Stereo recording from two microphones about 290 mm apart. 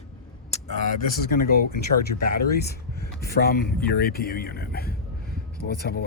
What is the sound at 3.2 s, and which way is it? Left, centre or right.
Speech, left.